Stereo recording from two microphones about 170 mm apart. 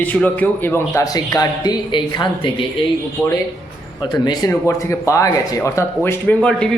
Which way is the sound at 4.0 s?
25° left (ahead or behind).